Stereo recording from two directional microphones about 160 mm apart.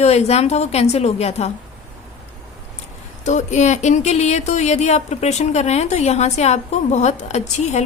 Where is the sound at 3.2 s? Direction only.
50° left (ahead or behind).